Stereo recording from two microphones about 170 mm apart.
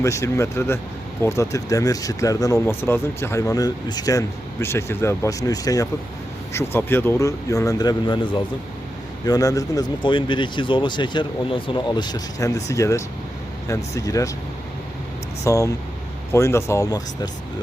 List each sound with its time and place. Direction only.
0.0 s speech: 15° left (ahead or behind)
15.4 s speech: 20° left (ahead or behind)